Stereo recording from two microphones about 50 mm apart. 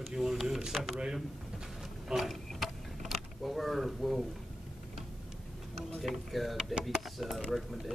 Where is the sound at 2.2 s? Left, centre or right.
Centre.